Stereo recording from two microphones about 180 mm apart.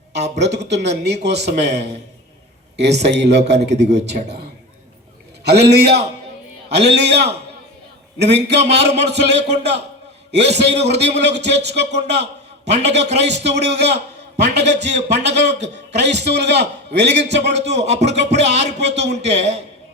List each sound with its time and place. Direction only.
0.3 s a man's voice: 70° right (ahead or behind)
5.5 s a man's voice: 70° right (ahead or behind)
17.7 s speech: 35° right (ahead or behind)
18.0 s a man's voice: 75° right (ahead or behind)